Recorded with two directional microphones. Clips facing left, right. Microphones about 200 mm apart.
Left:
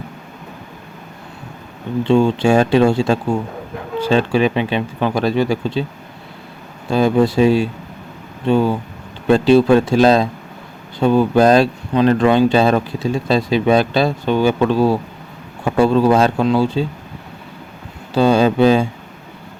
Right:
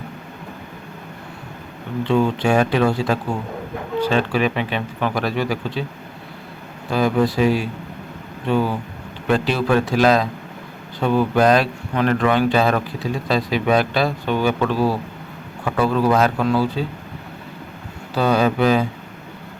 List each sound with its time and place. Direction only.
2.0 s speech: 30° left (ahead or behind)
6.9 s speech: 25° left (ahead or behind)
18.1 s speech: 25° left (ahead or behind)